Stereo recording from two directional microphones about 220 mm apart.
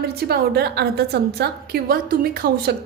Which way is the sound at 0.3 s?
45° right (ahead or behind).